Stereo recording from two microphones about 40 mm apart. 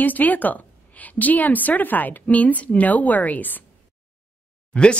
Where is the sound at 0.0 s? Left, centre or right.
Left.